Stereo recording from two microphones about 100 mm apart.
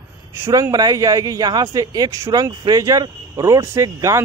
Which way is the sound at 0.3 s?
30° right (ahead or behind).